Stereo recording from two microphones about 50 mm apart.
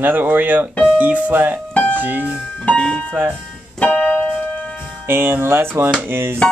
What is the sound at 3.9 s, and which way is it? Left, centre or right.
Keyboard, centre.